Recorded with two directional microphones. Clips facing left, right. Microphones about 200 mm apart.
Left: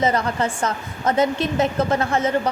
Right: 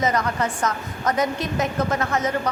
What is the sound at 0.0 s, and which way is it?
A woman's voice, 30° left (ahead or behind).